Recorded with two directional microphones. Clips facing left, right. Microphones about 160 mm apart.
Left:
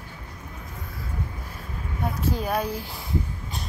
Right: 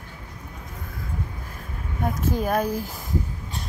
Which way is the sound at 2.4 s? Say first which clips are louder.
Right 3 dB; 45° right (ahead or behind).